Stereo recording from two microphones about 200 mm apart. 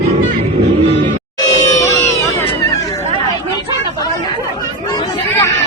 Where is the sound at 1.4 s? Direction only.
15° left (ahead or behind).